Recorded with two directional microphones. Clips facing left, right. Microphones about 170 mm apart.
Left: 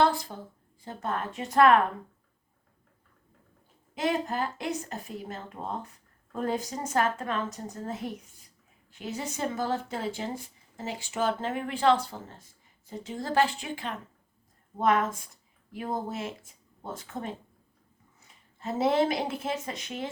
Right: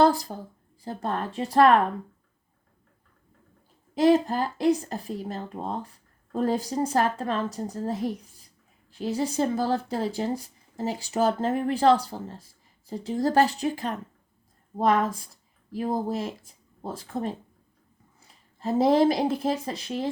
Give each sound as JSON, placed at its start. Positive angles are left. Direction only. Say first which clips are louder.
{"t": 0.0, "sound": "speech", "louder": "right 4 dB", "side_deg": -40}
{"t": 3.9, "sound": "speech", "louder": "right 8 dB", "side_deg": -35}